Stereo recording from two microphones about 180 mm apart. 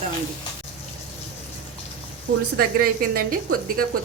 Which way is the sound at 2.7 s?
55° right (ahead or behind).